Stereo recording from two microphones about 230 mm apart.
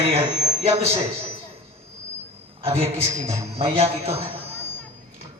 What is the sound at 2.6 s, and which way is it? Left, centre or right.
A man's voice, right.